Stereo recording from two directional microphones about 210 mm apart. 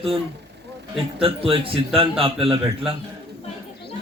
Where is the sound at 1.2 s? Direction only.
25° right (ahead or behind).